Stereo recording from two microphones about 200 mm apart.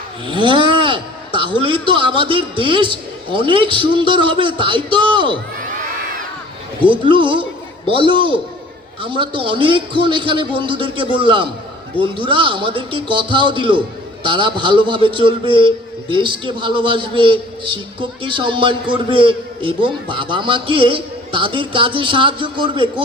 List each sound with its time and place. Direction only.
0.3 s a sound: 25° right (ahead or behind)
1.6 s a man's voice: 25° right (ahead or behind)
6.8 s a man's voice: 25° right (ahead or behind)